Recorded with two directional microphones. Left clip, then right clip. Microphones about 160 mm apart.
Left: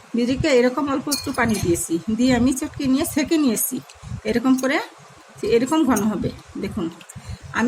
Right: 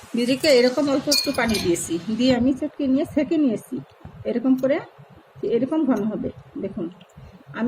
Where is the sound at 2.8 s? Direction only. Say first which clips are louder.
Left 1 dB; 90° left.